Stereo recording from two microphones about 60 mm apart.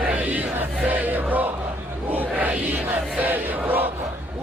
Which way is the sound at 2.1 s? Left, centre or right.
Right.